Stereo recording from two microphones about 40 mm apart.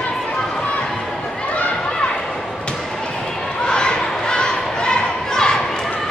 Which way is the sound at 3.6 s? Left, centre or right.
Left.